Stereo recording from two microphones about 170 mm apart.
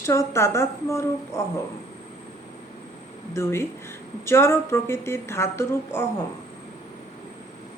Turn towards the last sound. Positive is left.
turn(degrees=15)  # may be behind; listen again after turning